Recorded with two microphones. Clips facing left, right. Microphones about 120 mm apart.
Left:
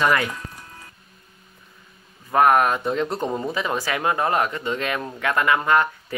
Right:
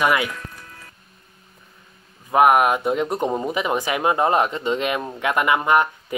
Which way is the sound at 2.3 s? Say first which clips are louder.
Right 2 dB; 15° right (ahead or behind).